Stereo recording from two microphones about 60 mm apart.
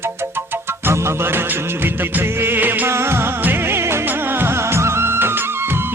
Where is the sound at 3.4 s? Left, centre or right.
Right.